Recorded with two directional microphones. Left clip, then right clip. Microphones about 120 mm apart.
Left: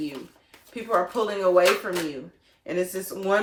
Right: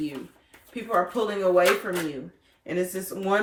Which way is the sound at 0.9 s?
30° left (ahead or behind).